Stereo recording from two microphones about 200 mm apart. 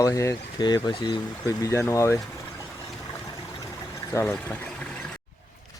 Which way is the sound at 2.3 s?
10° left (ahead or behind).